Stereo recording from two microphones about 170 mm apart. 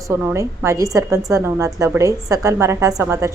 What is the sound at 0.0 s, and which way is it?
A woman's voice, 15° right (ahead or behind).